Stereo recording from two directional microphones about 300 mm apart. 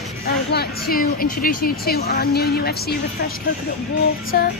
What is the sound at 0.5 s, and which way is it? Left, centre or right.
A woman's voice, left.